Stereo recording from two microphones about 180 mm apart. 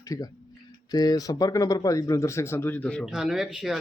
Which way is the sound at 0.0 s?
20° left (ahead or behind).